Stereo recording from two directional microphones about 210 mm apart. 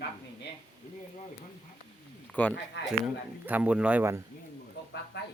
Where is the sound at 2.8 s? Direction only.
60° left (ahead or behind).